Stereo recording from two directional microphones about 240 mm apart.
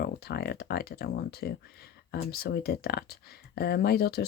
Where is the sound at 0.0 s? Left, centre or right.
Left.